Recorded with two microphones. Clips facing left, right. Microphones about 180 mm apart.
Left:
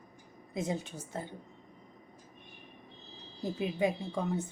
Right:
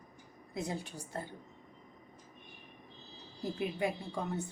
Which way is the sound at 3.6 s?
20° left (ahead or behind).